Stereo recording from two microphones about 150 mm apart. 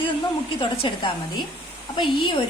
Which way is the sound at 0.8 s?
35° left (ahead or behind).